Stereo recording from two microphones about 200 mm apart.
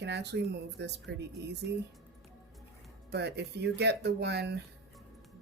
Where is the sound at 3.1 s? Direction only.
55° right (ahead or behind).